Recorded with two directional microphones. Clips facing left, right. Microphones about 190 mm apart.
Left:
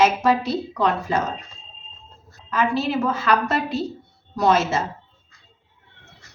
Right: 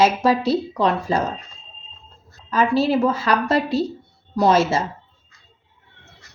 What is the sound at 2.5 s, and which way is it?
Speech, 35° right (ahead or behind).